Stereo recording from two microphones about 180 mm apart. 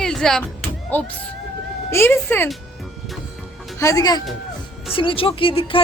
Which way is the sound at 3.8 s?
20° left (ahead or behind).